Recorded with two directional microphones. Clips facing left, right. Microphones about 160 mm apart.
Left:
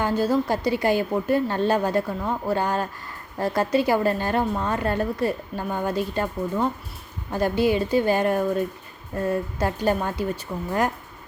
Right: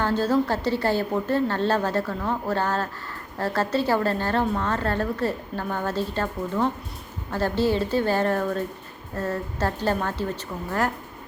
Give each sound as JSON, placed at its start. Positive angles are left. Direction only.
{"t": 0.0, "sound": "a woman's voice", "side_deg": 10}